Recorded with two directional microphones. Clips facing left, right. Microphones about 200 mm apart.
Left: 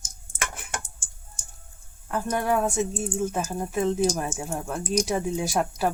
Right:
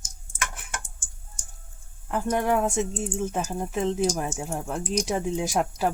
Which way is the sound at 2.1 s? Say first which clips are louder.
Right 1 dB; 15° right (ahead or behind).